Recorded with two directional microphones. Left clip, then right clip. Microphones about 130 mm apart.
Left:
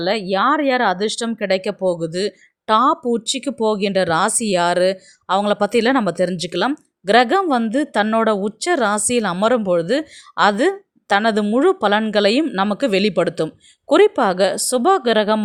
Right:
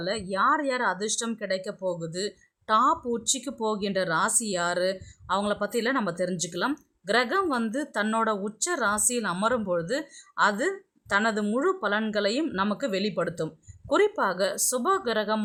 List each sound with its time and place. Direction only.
0.0 s speech: 40° left (ahead or behind)